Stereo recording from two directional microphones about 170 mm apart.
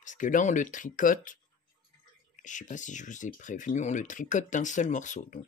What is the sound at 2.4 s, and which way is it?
Speech, 45° left (ahead or behind).